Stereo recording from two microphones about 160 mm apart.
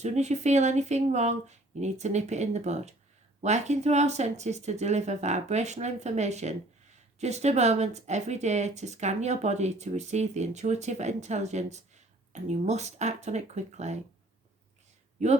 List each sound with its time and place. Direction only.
0.0 s speech: 45° right (ahead or behind)
15.2 s speech: 45° right (ahead or behind)